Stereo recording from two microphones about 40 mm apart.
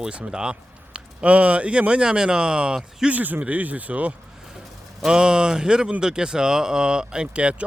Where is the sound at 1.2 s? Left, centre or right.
Right.